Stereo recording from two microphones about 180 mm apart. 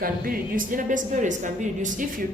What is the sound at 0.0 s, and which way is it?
A woman's voice, 50° right (ahead or behind).